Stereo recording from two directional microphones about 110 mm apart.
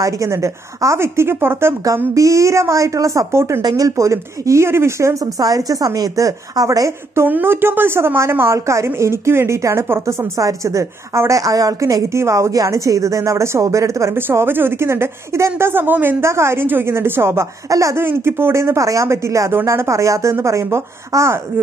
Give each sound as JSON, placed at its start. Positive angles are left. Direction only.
{"t": 0.0, "sound": "a woman's voice", "side_deg": -25}
{"t": 7.2, "sound": "a woman's voice", "side_deg": -20}